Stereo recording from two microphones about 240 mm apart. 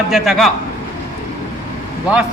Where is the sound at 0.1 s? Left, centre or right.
Centre.